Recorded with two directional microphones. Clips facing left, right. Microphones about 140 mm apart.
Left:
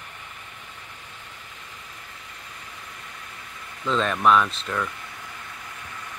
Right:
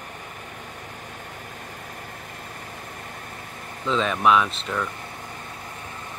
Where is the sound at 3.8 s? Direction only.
Centre (ahead or behind).